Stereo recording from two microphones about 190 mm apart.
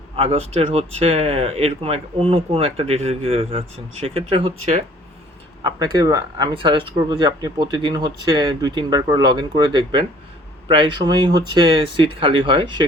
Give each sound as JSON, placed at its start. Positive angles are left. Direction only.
{"t": 0.2, "sound": "speech", "side_deg": -30}
{"t": 5.6, "sound": "speech", "side_deg": -20}